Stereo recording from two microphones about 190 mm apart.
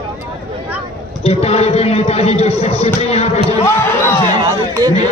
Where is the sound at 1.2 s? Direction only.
35° left (ahead or behind).